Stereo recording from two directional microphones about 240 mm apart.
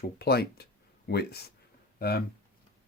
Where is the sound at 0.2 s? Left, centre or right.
Left.